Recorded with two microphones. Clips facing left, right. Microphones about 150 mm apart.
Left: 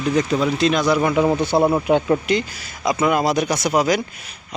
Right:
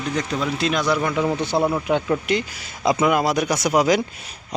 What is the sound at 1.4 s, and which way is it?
Speech, 10° left (ahead or behind).